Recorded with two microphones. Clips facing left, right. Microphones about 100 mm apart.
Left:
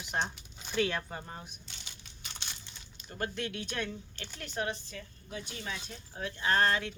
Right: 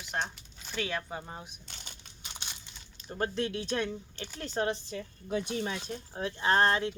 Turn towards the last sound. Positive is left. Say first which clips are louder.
# right 3 dB
turn(degrees=-25)  # may be behind; listen again after turning